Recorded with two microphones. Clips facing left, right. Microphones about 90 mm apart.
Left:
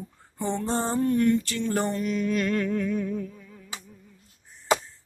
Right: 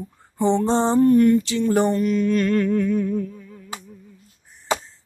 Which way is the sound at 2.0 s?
Centre (ahead or behind).